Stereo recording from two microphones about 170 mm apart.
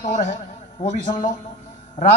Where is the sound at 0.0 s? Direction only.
45° left (ahead or behind).